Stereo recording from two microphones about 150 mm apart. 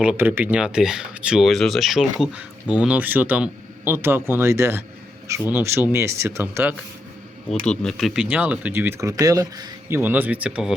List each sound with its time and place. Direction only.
0.0 s speech: 10° right (ahead or behind)
7.6 s speech: 5° left (ahead or behind)